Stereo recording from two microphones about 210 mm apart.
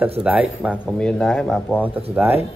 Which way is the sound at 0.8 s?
5° left (ahead or behind).